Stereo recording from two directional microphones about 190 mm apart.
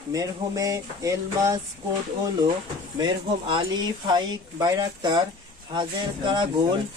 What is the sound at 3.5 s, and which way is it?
Speech, 25° right (ahead or behind).